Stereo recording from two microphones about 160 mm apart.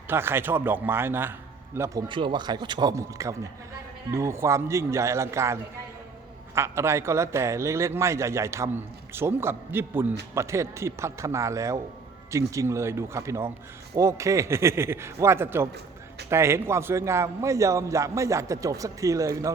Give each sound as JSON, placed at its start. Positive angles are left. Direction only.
{"t": 0.1, "sound": "a man's voice", "side_deg": -15}